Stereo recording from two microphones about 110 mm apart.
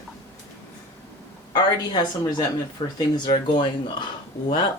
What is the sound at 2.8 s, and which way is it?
Speech, 55° left (ahead or behind).